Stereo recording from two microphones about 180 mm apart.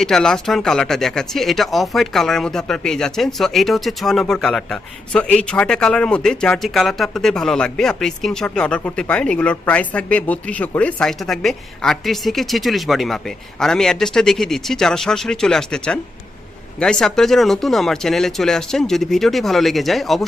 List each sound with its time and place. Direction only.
0.0 s speech: 5° left (ahead or behind)